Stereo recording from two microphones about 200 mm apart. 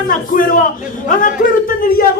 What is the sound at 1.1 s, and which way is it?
Speech, 40° left (ahead or behind).